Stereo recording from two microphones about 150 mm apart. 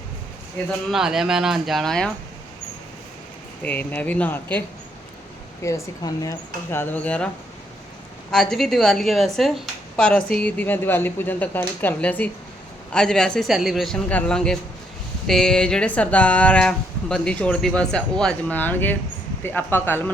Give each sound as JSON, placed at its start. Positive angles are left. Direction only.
{"t": 0.9, "sound": "speech", "side_deg": -5}
{"t": 3.6, "sound": "speech", "side_deg": 10}
{"t": 5.6, "sound": "speech", "side_deg": 20}
{"t": 8.3, "sound": "speech", "side_deg": 5}